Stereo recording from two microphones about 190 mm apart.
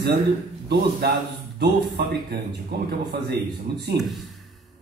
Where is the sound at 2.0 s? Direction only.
60° right (ahead or behind).